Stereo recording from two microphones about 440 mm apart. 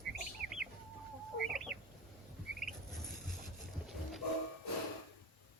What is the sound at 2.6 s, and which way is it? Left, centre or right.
Rodents, centre.